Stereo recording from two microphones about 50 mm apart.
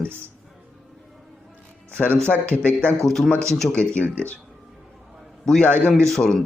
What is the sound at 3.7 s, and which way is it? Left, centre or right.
Speech, left.